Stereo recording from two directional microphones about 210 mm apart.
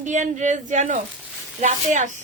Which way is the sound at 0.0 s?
35° right (ahead or behind).